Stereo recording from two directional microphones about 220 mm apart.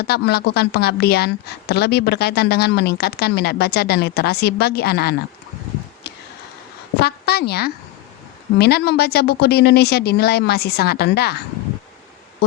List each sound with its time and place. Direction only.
0.0 s a woman's voice: 45° left (ahead or behind)
7.0 s a woman's voice: 45° left (ahead or behind)